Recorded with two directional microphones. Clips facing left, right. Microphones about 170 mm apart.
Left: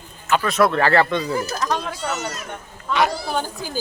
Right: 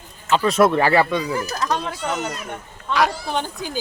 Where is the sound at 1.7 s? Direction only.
5° left (ahead or behind).